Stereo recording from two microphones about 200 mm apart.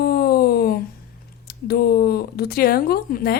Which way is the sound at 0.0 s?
50° left (ahead or behind).